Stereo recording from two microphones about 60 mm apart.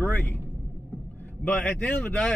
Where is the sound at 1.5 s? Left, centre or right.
Left.